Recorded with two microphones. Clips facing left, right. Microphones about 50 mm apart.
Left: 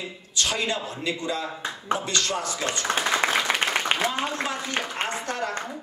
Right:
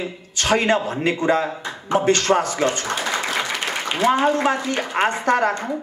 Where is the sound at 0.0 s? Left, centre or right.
Right.